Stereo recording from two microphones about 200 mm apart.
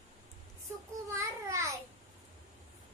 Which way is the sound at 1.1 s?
15° right (ahead or behind).